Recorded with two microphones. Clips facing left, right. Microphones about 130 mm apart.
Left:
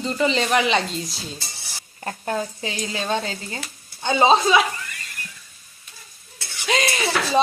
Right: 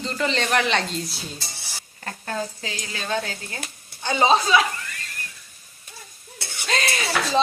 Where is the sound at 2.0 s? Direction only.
20° left (ahead or behind).